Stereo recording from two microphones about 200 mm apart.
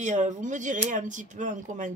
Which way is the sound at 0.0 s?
40° right (ahead or behind).